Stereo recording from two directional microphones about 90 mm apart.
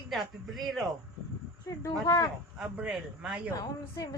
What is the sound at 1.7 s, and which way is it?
Speech, 40° left (ahead or behind).